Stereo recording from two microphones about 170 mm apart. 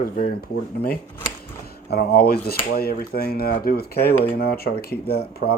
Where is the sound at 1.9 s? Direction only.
65° left (ahead or behind).